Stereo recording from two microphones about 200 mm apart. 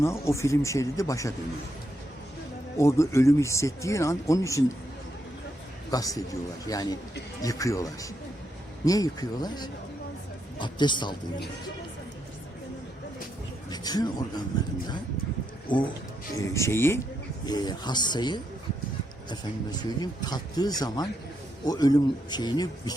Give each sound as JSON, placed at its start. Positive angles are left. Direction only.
{"t": 0.0, "sound": "speech", "side_deg": 15}
{"t": 2.7, "sound": "speech", "side_deg": 15}
{"t": 5.9, "sound": "speech", "side_deg": 15}
{"t": 13.7, "sound": "speech", "side_deg": 20}
{"t": 15.7, "sound": "speech", "side_deg": 25}
{"t": 19.8, "sound": "speech", "side_deg": 20}